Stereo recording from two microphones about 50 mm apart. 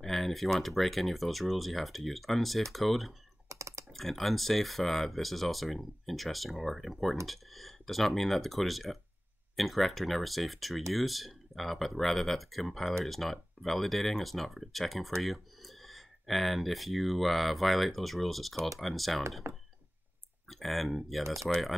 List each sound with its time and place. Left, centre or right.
0.0 s speech: centre
3.4 s computer keyboard: right
3.9 s speech: centre
19.4 s speech: right
20.4 s speech: centre